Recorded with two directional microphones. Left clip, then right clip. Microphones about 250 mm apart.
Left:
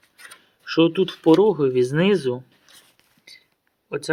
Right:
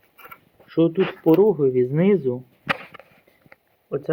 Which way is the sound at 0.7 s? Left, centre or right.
Centre.